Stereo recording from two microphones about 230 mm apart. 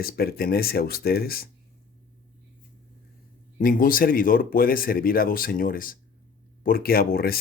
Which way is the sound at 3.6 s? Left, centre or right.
Left.